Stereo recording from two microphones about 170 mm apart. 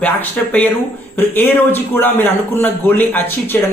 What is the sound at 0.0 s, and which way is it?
A man's voice, 10° left (ahead or behind).